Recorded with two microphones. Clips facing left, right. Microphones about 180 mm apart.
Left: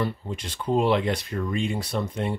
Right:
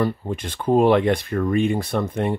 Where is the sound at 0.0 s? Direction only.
55° right (ahead or behind).